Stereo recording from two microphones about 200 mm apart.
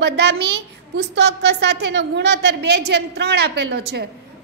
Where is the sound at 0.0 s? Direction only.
55° right (ahead or behind).